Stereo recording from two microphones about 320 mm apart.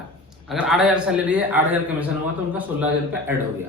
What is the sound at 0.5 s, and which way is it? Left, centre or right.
A man's voice, centre.